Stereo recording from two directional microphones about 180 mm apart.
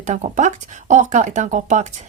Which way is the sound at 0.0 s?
45° right (ahead or behind).